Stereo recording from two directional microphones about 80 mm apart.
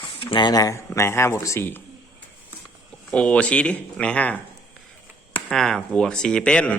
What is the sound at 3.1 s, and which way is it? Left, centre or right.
Speech, centre.